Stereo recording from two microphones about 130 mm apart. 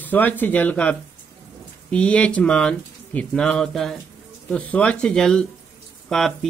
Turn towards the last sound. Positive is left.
turn(degrees=5)  # may be behind; listen again after turning